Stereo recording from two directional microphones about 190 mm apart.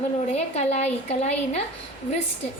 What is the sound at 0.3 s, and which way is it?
A woman's voice, 35° left (ahead or behind).